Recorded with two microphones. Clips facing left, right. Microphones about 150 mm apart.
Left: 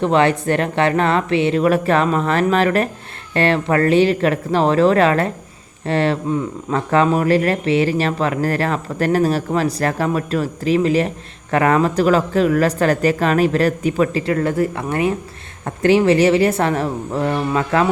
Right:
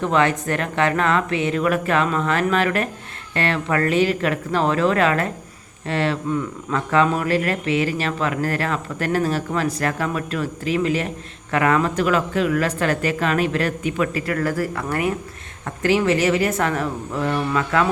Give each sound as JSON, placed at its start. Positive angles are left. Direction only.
{"t": 0.0, "sound": "speech", "side_deg": 30}